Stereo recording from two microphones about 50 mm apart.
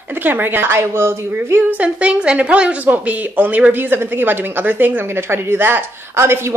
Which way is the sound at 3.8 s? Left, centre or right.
Right.